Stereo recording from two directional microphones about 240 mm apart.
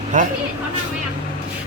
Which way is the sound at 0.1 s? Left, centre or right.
Right.